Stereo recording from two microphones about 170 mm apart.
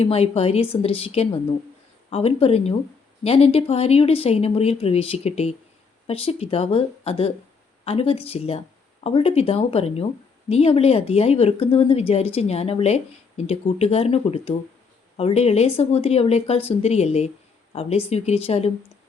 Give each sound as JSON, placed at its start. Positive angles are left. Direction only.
{"t": 0.0, "sound": "speech", "side_deg": 35}